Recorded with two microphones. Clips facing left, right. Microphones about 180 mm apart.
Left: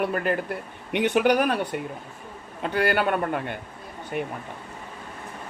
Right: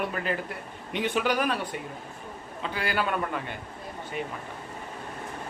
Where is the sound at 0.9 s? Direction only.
65° left (ahead or behind).